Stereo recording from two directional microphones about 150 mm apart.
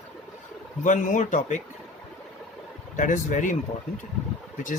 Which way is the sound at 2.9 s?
55° left (ahead or behind).